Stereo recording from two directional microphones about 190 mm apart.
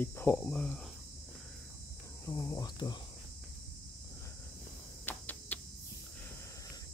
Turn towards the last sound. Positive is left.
turn(degrees=10)  # may be behind; listen again after turning